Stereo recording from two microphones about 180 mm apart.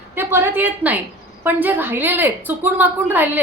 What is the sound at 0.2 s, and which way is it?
A woman's voice, 10° right (ahead or behind).